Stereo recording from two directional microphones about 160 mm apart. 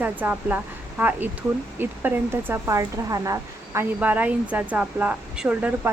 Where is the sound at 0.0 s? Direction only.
10° right (ahead or behind).